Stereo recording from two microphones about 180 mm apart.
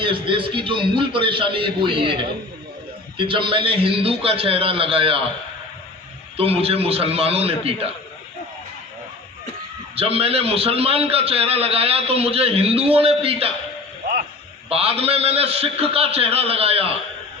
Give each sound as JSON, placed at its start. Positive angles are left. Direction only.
{"t": 0.0, "sound": "a man's voice", "side_deg": -30}
{"t": 6.3, "sound": "a man's voice", "side_deg": -35}
{"t": 9.9, "sound": "a man's voice", "side_deg": -35}
{"t": 14.7, "sound": "a man's voice", "side_deg": -35}